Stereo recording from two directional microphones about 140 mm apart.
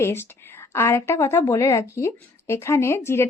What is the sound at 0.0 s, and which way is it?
A woman's voice, 15° left (ahead or behind).